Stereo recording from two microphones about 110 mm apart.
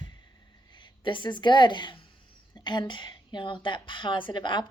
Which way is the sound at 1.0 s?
45° left (ahead or behind).